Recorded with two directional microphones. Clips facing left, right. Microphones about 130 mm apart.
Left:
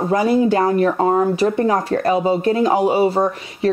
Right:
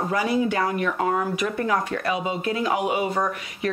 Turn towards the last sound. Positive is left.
turn(degrees=30)  # may be behind; listen again after turning